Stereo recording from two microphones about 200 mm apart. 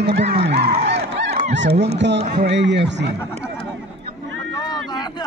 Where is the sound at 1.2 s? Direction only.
35° right (ahead or behind).